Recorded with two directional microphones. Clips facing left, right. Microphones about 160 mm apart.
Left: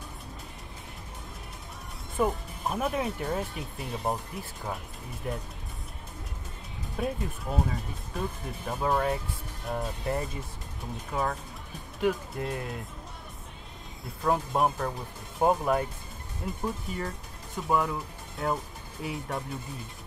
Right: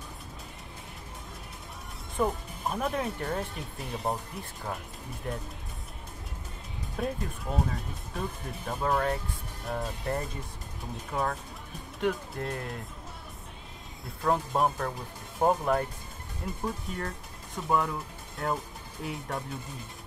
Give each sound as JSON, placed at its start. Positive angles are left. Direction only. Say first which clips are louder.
{"t": 2.1, "sound": "speech", "louder": "left 1 dB", "side_deg": 5}
{"t": 7.0, "sound": "speech", "louder": "left 1 dB", "side_deg": 0}
{"t": 14.0, "sound": "speech", "louder": "even", "side_deg": 0}